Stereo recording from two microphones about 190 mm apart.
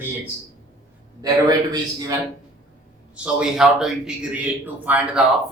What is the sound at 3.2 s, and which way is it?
A man's voice, 5° right (ahead or behind).